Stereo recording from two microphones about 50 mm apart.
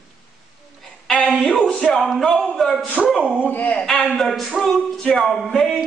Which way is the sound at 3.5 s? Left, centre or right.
Left.